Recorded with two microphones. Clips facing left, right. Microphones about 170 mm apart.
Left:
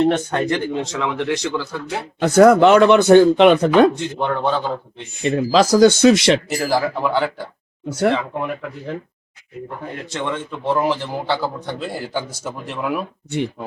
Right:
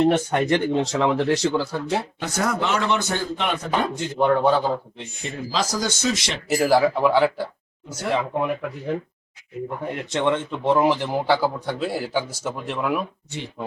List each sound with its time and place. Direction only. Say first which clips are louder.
0.0 s a man's voice: left 1 dB; 10° right (ahead or behind)
0.7 s speech: right 3 dB; 35° right (ahead or behind)
2.1 s speech: left 14 dB; 55° left (ahead or behind); by 3.8 s 75° left (ahead or behind)
3.9 s a man's voice: right 2 dB; 5° right (ahead or behind)
5.2 s speech: left 11 dB; 75° left (ahead or behind)
6.5 s speech: right 2 dB; 5° right (ahead or behind)
7.9 s speech: left 11 dB; 65° left (ahead or behind)
8.1 s a man's voice: even; 15° right (ahead or behind)
10.1 s a man's voice: right 4 dB; 20° right (ahead or behind); by 13.1 s centre (ahead or behind)